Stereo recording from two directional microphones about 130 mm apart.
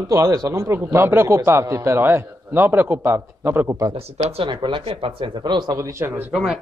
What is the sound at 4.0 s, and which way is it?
Speech, 50° right (ahead or behind).